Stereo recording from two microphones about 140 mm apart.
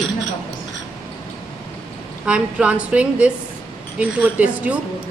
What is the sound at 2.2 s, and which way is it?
A woman's voice, 5° right (ahead or behind).